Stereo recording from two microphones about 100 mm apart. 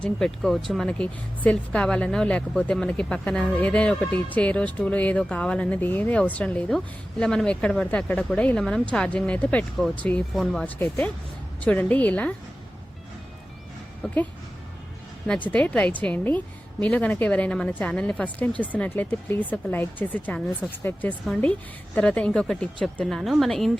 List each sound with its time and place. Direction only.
0.0 s speech: 5° left (ahead or behind)
10.3 s speech: 5° left (ahead or behind)
10.8 s speech: 20° left (ahead or behind)
14.0 s speech: 15° left (ahead or behind)
15.3 s speech: 15° left (ahead or behind)